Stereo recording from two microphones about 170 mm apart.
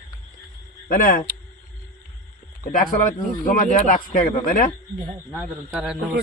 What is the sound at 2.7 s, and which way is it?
A man's voice, 55° left (ahead or behind).